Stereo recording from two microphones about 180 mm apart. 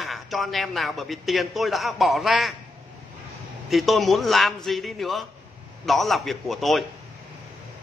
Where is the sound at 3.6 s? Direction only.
Centre (ahead or behind).